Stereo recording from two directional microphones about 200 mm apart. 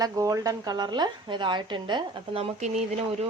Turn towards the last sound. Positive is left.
turn(degrees=-30)  # may be behind; listen again after turning